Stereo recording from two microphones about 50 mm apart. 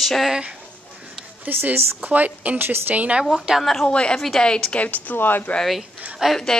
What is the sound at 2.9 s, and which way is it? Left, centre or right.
Speech, right.